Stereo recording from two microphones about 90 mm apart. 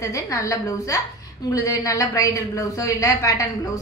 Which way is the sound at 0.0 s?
35° left (ahead or behind).